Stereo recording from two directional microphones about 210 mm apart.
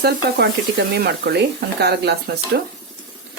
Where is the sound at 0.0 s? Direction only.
50° right (ahead or behind).